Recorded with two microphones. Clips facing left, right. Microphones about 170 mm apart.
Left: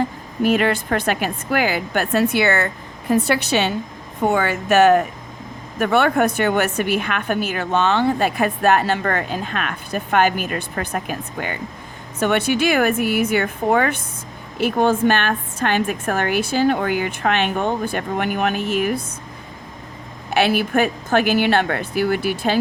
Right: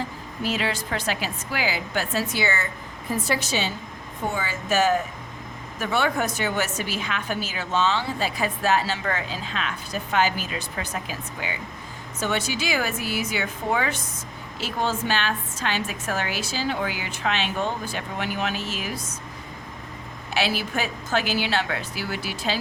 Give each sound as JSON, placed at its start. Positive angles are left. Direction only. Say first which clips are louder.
{"t": 0.0, "sound": "a woman's voice", "louder": "left 9 dB", "side_deg": 55}
{"t": 20.3, "sound": "a woman's voice", "louder": "left 8 dB", "side_deg": 55}